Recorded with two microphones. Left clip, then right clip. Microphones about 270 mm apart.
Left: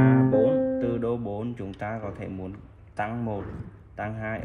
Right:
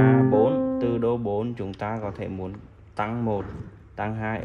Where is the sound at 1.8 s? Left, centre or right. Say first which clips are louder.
Right 3 dB; right.